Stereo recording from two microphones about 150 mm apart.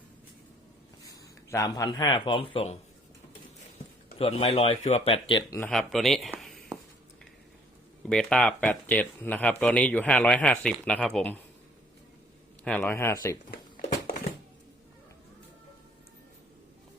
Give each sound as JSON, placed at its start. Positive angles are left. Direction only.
{"t": 1.5, "sound": "speech", "side_deg": 20}
{"t": 4.2, "sound": "speech", "side_deg": 40}
{"t": 5.5, "sound": "speech", "side_deg": 15}
{"t": 5.7, "sound": "speech", "side_deg": 0}
{"t": 8.0, "sound": "speech", "side_deg": 5}
{"t": 12.6, "sound": "speech", "side_deg": 10}